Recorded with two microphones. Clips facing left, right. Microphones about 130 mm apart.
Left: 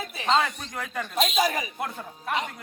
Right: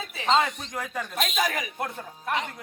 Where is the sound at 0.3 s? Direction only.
Centre (ahead or behind).